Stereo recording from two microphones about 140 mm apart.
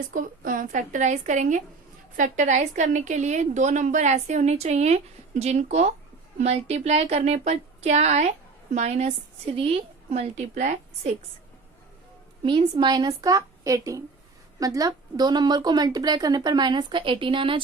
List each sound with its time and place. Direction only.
0.1 s a woman's voice: 75° right (ahead or behind)
12.4 s a woman's voice: 35° right (ahead or behind)